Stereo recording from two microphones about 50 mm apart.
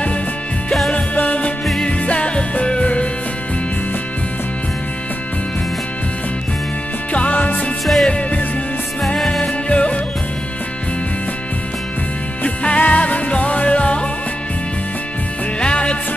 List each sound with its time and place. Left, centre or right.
0.9 s music: left
7.1 s music: left
7.8 s music: centre
9.7 s music: left
12.4 s music: left
15.6 s music: left